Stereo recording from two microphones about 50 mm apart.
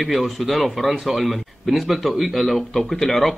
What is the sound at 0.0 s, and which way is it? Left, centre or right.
A man's voice, centre.